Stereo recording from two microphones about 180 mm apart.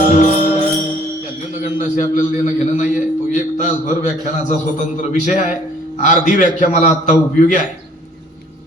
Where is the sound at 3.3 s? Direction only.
45° left (ahead or behind).